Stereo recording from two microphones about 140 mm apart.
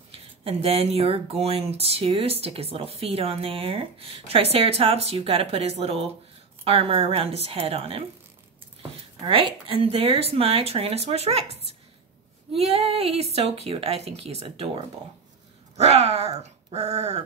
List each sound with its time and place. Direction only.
0.1 s speech: 45° right (ahead or behind)
9.2 s speech: 40° right (ahead or behind)
12.7 s speech: 45° right (ahead or behind)
15.7 s speech: 50° right (ahead or behind)